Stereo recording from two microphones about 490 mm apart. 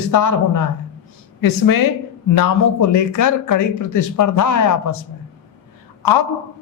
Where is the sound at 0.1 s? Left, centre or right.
Left.